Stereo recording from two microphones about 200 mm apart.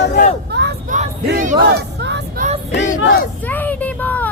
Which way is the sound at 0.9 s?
40° right (ahead or behind).